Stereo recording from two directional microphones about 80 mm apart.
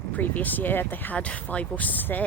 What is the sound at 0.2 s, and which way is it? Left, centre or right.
Speech, left.